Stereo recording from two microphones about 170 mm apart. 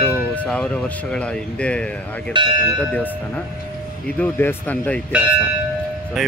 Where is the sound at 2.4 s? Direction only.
25° right (ahead or behind).